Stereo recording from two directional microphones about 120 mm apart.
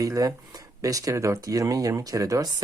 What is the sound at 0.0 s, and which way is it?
Speech, 30° right (ahead or behind).